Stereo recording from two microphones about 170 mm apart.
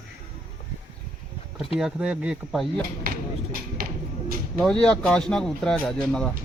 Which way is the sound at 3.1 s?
60° right (ahead or behind).